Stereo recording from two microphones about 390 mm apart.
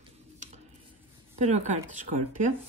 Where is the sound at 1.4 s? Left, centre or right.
Centre.